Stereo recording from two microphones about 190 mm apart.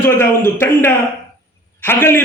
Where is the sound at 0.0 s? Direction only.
15° left (ahead or behind).